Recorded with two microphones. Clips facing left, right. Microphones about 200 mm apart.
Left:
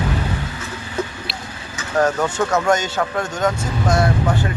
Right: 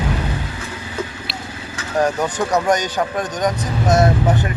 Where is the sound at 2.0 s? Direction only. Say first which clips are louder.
Left 1 dB; 15° right (ahead or behind).